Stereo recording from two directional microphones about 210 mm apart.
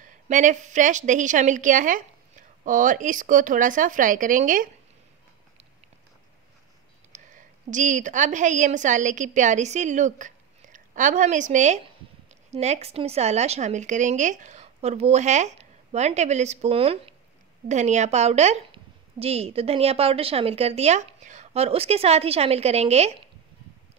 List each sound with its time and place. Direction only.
0.0 s a woman's voice: 35° right (ahead or behind)
7.1 s a woman's voice: 35° right (ahead or behind)